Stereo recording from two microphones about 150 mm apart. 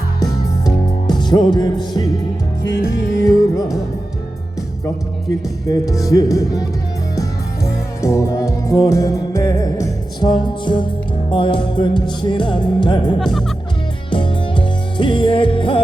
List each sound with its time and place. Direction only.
0.2 s music: 25° left (ahead or behind)
1.5 s speech: 25° left (ahead or behind)
3.2 s speech: 25° left (ahead or behind)
5.6 s speech: 25° left (ahead or behind)
7.2 s music: 20° left (ahead or behind)
13.1 s speech: centre (ahead or behind)
14.1 s music: 35° left (ahead or behind)